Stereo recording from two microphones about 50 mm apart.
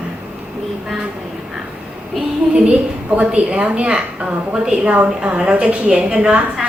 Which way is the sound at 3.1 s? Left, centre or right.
Right.